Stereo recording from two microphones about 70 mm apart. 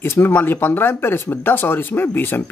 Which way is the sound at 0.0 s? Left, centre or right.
Left.